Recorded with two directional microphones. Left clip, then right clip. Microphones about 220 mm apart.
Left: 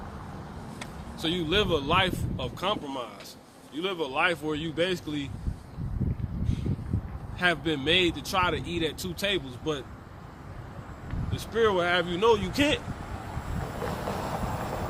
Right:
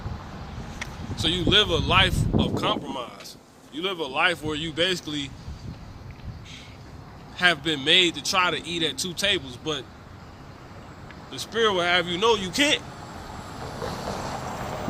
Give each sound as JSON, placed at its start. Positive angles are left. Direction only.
{"t": 0.8, "sound": "speech", "side_deg": 0}
{"t": 7.3, "sound": "speech", "side_deg": 0}
{"t": 11.3, "sound": "speech", "side_deg": 0}
{"t": 13.7, "sound": "vehicle", "side_deg": 20}